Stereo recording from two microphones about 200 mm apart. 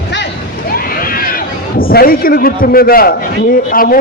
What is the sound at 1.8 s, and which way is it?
A man's voice, 45° left (ahead or behind).